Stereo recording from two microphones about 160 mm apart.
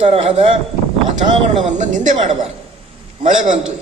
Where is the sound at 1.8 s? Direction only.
50° right (ahead or behind).